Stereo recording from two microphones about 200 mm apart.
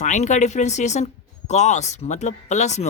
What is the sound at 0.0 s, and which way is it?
Speech, 35° left (ahead or behind).